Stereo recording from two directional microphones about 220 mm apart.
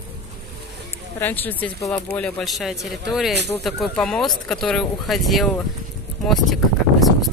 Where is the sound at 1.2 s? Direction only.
10° left (ahead or behind).